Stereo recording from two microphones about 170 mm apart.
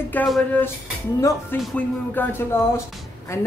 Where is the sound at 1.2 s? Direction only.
20° left (ahead or behind).